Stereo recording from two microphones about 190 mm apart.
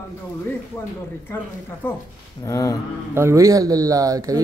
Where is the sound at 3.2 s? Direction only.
15° right (ahead or behind).